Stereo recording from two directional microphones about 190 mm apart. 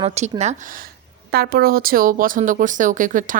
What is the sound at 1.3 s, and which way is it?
A woman's voice, 55° right (ahead or behind).